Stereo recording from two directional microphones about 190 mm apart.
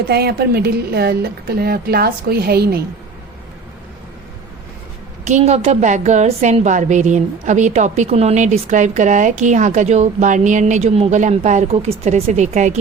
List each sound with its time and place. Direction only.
0.1 s a woman's voice: 55° right (ahead or behind)
5.2 s a woman's voice: 35° right (ahead or behind)